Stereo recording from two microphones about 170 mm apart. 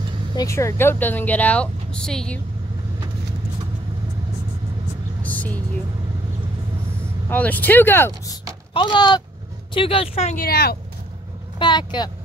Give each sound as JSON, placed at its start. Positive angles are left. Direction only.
{"t": 0.4, "sound": "speech", "side_deg": 15}
{"t": 5.2, "sound": "vehicle", "side_deg": 10}
{"t": 7.2, "sound": "speech", "side_deg": 10}
{"t": 8.7, "sound": "a woman's voice", "side_deg": 25}
{"t": 10.4, "sound": "speech", "side_deg": 65}
{"t": 11.5, "sound": "speech", "side_deg": 25}